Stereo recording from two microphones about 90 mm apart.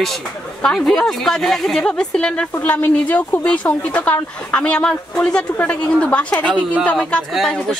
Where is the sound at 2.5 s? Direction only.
20° left (ahead or behind).